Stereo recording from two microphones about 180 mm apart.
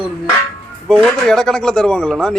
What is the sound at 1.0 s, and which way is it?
A man's voice, 5° left (ahead or behind).